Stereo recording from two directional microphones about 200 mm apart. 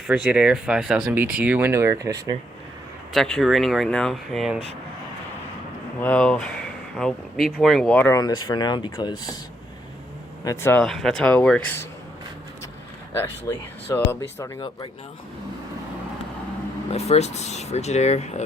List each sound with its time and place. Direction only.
0.1 s speech: 5° right (ahead or behind)
3.1 s speech: centre (ahead or behind)
6.0 s speech: 5° left (ahead or behind)
10.4 s speech: 15° left (ahead or behind)
13.1 s speech: 10° left (ahead or behind)
16.9 s speech: 30° left (ahead or behind)